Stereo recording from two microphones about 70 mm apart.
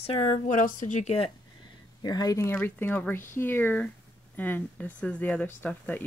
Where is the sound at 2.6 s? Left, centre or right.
Left.